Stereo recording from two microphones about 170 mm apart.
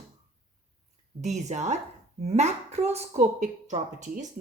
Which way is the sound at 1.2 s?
45° right (ahead or behind).